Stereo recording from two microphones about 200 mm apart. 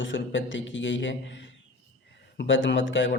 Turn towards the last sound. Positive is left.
turn(degrees=70)  # may be behind; listen again after turning